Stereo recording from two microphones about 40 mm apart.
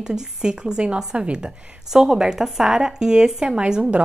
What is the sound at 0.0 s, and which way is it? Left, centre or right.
A woman's voice, centre.